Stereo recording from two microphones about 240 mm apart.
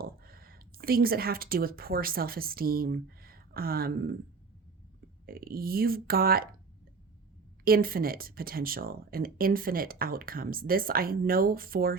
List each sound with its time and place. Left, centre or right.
0.0 s speech: right
5.2 s speech: right
7.6 s speech: right